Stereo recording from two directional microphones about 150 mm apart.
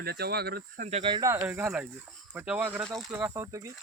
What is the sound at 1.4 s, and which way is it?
Speech, 10° right (ahead or behind).